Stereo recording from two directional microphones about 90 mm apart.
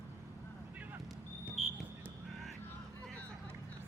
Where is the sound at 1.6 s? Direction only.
5° right (ahead or behind).